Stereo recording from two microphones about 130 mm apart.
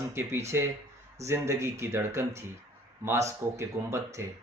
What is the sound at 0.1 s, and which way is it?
Speech, 20° right (ahead or behind).